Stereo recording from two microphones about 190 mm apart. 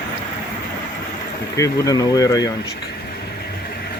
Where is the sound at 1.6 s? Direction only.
20° left (ahead or behind).